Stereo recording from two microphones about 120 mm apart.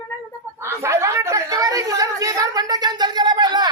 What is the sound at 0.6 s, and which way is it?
Chatter, 25° right (ahead or behind).